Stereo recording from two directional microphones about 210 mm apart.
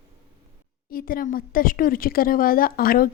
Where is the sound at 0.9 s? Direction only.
45° left (ahead or behind).